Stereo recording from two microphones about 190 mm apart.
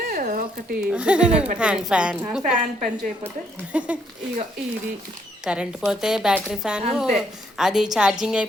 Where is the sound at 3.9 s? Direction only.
5° right (ahead or behind).